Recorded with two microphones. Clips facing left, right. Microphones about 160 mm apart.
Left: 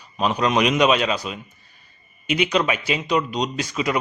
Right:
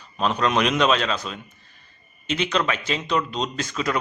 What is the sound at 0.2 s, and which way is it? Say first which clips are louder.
A man's voice: left 2 dB; 5° left (ahead or behind).